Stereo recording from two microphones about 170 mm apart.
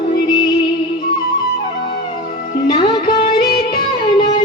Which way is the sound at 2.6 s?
25° left (ahead or behind).